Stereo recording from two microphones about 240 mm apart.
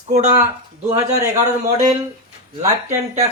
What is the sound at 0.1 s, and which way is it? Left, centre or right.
Speech, right.